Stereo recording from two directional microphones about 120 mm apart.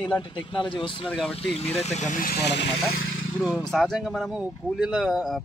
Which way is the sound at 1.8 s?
80° left.